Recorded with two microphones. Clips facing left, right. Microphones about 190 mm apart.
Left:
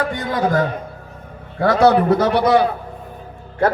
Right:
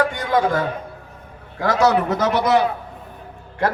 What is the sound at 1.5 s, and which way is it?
A man's voice, 30° left (ahead or behind).